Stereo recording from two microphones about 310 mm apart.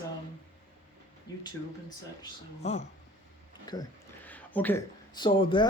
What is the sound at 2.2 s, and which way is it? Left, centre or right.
Speech, left.